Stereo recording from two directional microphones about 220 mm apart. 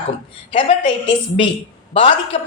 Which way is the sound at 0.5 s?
25° left (ahead or behind).